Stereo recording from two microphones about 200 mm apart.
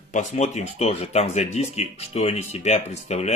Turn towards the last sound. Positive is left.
turn(degrees=35)  # may be behind; listen again after turning